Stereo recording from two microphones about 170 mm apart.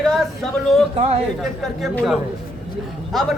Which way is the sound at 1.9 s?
Centre (ahead or behind).